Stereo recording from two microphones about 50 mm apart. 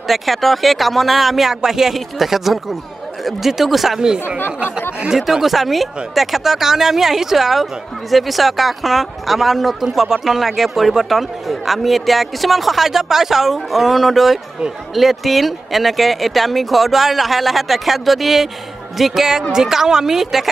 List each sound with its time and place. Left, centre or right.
0.1 s speech: centre
4.0 s a woman's voice: centre